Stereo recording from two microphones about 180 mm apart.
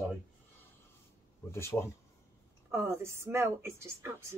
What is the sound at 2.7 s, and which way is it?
A woman's voice, 15° right (ahead or behind).